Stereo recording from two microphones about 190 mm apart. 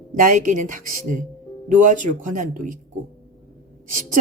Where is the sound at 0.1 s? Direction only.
45° right (ahead or behind).